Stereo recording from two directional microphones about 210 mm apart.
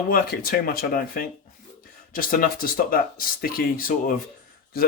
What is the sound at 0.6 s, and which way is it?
Speech, 45° left (ahead or behind).